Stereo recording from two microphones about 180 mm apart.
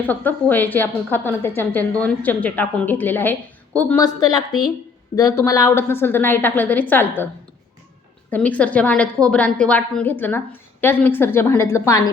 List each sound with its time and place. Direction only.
0.0 s a woman's voice: 10° left (ahead or behind)
4.0 s a woman's voice: 20° left (ahead or behind)
8.3 s a woman's voice: 10° left (ahead or behind)